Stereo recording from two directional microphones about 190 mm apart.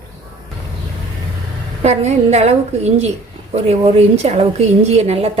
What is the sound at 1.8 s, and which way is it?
A woman's voice, 35° right (ahead or behind).